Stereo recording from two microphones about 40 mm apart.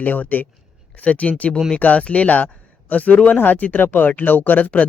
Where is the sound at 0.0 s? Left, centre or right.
Left.